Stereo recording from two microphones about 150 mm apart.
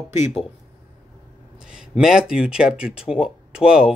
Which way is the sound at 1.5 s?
5° right (ahead or behind).